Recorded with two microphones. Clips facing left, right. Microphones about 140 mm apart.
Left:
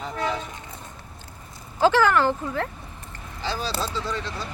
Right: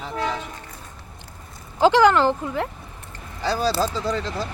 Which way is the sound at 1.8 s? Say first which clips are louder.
Right 3 dB; 15° right (ahead or behind).